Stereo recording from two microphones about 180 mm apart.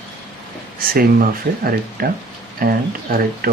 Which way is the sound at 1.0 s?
55° right (ahead or behind).